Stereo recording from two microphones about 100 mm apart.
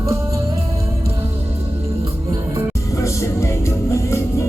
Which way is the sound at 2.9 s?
30° left (ahead or behind).